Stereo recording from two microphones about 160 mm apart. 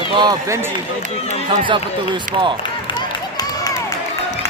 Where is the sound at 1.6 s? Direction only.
30° right (ahead or behind).